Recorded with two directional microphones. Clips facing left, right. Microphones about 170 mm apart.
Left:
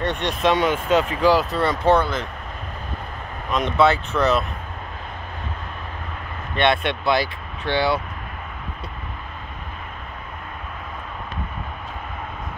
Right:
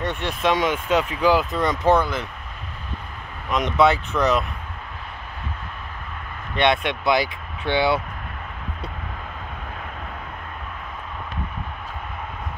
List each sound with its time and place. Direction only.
0.0 s speech: 5° right (ahead or behind)
3.5 s speech: 15° right (ahead or behind)
6.5 s speech: 15° right (ahead or behind)